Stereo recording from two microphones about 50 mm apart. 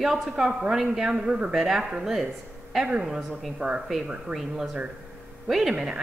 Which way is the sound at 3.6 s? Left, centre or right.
Right.